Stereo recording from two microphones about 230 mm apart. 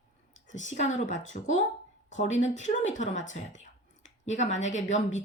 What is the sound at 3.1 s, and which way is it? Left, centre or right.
Speech, left.